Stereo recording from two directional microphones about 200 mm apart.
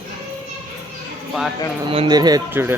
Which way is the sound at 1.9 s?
25° right (ahead or behind).